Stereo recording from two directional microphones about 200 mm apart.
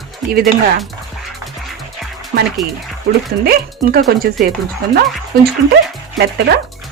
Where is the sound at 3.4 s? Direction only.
50° right (ahead or behind).